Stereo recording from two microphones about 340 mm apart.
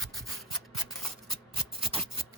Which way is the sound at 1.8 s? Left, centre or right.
Centre.